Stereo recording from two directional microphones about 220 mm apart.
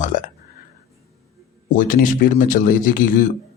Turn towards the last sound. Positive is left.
turn(degrees=35)  # may be behind; listen again after turning